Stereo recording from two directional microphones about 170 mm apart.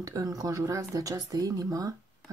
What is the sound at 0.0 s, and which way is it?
Speech, 20° right (ahead or behind).